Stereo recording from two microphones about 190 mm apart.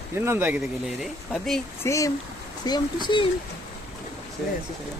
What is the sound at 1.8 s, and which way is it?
Speech, 15° left (ahead or behind).